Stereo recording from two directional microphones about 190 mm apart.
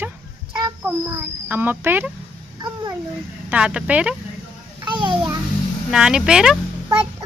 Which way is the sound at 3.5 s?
5° right (ahead or behind).